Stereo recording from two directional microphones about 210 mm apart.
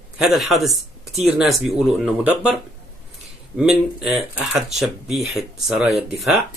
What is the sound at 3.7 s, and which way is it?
Speech, centre (ahead or behind).